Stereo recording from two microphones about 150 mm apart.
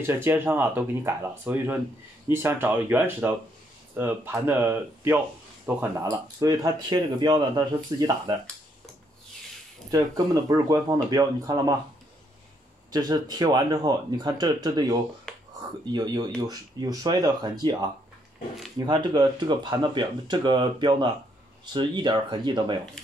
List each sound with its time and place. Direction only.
0.0 s speech: 15° right (ahead or behind)
9.8 s speech: 25° right (ahead or behind)
12.9 s speech: 25° right (ahead or behind)
15.3 s a sound: 5° left (ahead or behind)
15.9 s speech: 30° right (ahead or behind)